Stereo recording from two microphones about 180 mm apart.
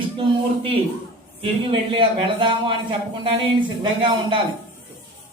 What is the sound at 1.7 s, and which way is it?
A man's voice, 30° right (ahead or behind).